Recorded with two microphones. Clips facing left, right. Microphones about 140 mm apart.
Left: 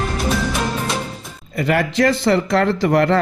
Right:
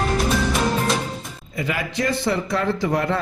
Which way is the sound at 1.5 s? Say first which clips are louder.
Left 7 dB; 70° left (ahead or behind).